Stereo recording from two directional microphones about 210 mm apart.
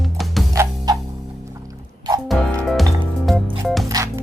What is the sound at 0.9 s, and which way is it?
Music, 20° right (ahead or behind).